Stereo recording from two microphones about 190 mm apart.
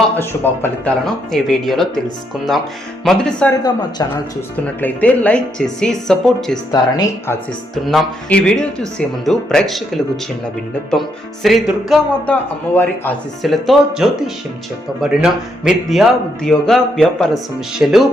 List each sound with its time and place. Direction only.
0.2 s a man's voice: 10° left (ahead or behind)
3.0 s a man's voice: 5° left (ahead or behind)
3.6 s speech: 20° left (ahead or behind)
4.6 s a man's voice: 5° left (ahead or behind)
6.7 s speech: 20° left (ahead or behind)
7.9 s a man's voice: 5° left (ahead or behind)
11.4 s a man's voice: centre (ahead or behind)
17.8 s speech: 10° right (ahead or behind)